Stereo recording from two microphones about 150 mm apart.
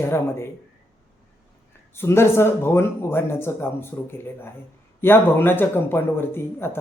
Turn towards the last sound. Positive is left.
turn(degrees=15)  # may be behind; listen again after turning